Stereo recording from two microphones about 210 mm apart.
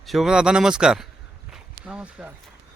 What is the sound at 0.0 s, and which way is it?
A man's voice, centre (ahead or behind).